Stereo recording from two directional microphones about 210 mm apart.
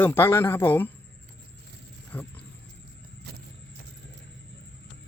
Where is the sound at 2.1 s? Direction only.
10° left (ahead or behind).